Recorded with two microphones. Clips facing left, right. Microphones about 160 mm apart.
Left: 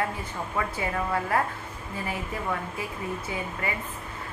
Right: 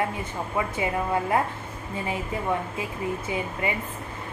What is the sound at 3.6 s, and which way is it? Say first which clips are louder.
Speech: right 4 dB; 20° right (ahead or behind).